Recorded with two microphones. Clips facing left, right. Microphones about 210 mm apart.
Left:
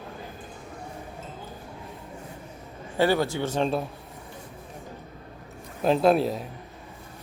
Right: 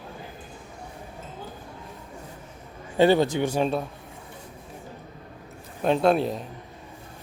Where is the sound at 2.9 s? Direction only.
20° right (ahead or behind).